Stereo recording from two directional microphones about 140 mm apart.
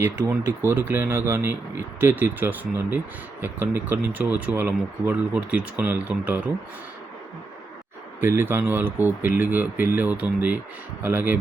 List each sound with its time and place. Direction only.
0.0 s speech: 15° right (ahead or behind)
8.2 s speech: 15° right (ahead or behind)